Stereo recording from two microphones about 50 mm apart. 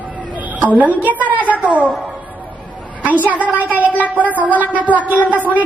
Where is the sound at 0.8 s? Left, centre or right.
Right.